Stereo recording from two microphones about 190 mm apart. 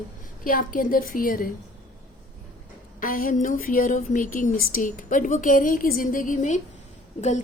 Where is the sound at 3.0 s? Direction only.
50° left (ahead or behind).